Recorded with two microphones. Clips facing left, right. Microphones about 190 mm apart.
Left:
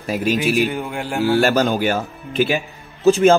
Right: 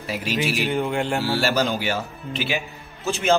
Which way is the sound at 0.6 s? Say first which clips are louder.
Left 2 dB; 5° left (ahead or behind).